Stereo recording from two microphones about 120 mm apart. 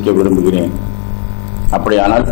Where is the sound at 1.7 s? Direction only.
20° left (ahead or behind).